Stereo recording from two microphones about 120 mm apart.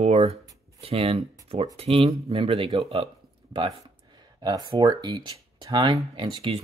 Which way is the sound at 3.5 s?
40° right (ahead or behind).